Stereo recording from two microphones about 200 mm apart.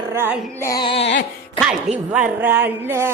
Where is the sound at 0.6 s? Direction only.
20° left (ahead or behind).